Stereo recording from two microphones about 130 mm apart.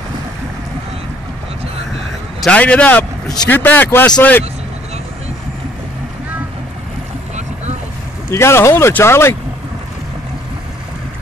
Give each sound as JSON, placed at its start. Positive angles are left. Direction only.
{"t": 2.4, "sound": "a man's voice", "side_deg": 10}
{"t": 8.3, "sound": "speech", "side_deg": 20}